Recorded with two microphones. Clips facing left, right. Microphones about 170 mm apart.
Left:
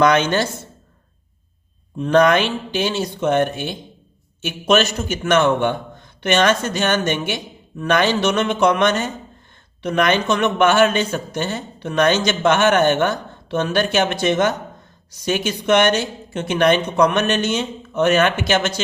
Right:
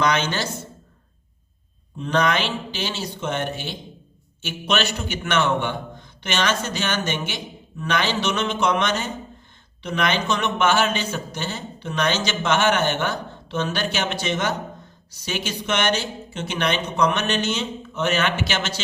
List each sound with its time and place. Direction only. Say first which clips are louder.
0.0 s speech: left 7 dB; 50° left (ahead or behind)
2.0 s speech: left 7 dB; 50° left (ahead or behind)